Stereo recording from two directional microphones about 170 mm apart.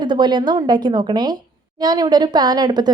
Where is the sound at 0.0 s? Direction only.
25° right (ahead or behind).